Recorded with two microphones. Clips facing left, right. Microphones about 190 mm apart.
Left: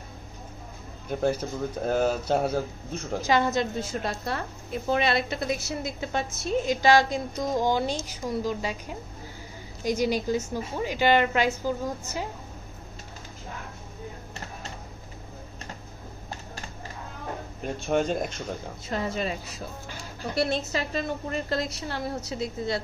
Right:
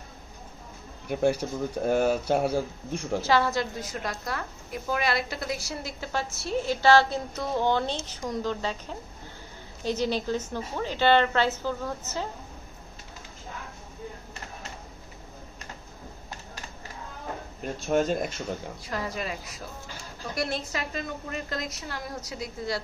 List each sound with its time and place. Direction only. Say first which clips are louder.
1.0 s speech: right 1 dB; 10° right (ahead or behind)
3.2 s a woman's voice: left 1 dB; 20° left (ahead or behind)
17.7 s speech: right 1 dB; centre (ahead or behind)
18.9 s a woman's voice: left 4 dB; 25° left (ahead or behind)